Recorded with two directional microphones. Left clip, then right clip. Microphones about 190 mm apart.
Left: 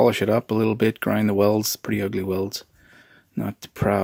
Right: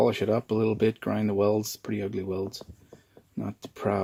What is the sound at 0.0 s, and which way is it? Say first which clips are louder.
Speech: left 6 dB; 35° left (ahead or behind).